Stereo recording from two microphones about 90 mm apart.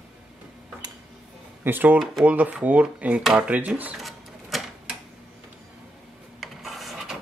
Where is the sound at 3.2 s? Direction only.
5° right (ahead or behind).